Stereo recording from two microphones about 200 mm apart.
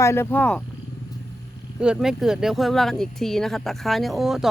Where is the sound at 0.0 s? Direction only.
15° left (ahead or behind).